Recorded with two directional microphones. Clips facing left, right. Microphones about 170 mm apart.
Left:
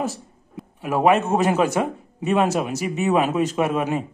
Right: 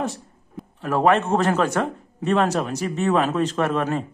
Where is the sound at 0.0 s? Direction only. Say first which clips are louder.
Left 1 dB; 5° left (ahead or behind).